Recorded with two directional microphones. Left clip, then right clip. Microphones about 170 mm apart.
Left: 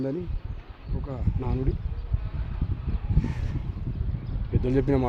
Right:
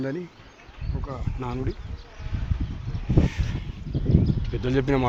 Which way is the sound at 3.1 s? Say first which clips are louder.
Right 9 dB; 5° left (ahead or behind).